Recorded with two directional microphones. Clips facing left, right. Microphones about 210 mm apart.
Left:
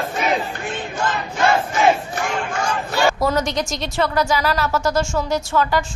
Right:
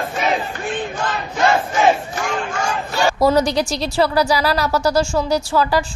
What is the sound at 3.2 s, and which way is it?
Speech, 35° right (ahead or behind).